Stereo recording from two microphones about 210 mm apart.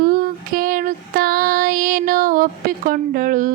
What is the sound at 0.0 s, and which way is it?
Female singing, 45° right (ahead or behind).